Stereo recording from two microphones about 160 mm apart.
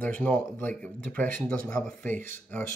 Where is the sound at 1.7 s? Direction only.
10° left (ahead or behind).